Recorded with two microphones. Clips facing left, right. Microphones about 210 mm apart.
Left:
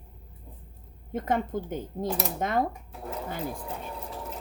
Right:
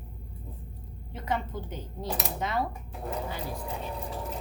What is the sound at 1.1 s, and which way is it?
A woman's voice, 50° left (ahead or behind).